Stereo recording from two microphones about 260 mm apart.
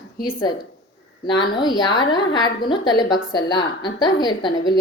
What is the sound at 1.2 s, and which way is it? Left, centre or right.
A woman's voice, centre.